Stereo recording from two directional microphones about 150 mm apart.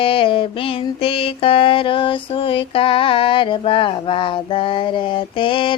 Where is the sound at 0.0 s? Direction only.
35° left (ahead or behind).